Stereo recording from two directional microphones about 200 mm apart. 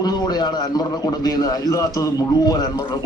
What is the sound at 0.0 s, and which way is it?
A man's voice, 20° left (ahead or behind).